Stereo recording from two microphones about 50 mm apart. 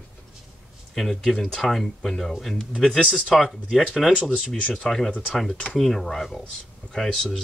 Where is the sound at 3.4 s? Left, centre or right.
Centre.